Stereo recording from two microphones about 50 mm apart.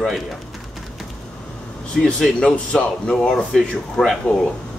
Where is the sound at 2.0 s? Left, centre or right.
Centre.